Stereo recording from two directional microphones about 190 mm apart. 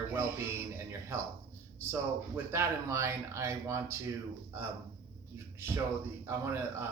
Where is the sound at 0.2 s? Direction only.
15° right (ahead or behind).